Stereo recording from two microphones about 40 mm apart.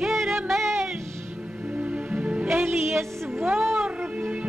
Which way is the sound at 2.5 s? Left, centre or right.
Right.